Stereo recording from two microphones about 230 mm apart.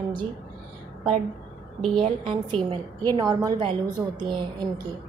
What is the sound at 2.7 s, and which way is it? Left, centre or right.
A woman's voice, centre.